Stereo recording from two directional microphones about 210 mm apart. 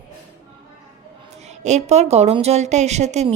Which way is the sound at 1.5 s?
30° right (ahead or behind).